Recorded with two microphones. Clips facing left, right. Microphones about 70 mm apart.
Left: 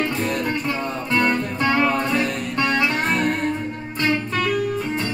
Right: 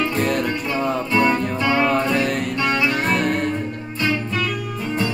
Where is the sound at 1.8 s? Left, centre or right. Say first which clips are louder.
Right 3 dB; right.